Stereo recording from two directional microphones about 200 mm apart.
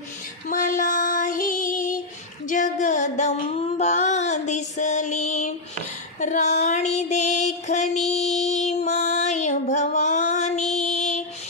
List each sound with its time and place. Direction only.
0.5 s child singing: 40° left (ahead or behind)
2.4 s music: 40° left (ahead or behind)
6.1 s female singing: 35° left (ahead or behind)